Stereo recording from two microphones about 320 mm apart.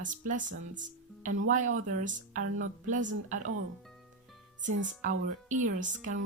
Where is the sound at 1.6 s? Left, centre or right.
Right.